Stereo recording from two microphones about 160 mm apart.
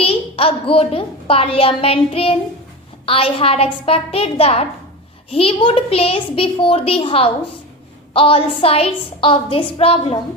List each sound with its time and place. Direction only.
0.0 s a woman's voice: 35° left (ahead or behind)